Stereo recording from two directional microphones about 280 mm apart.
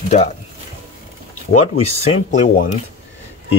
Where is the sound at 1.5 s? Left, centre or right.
Left.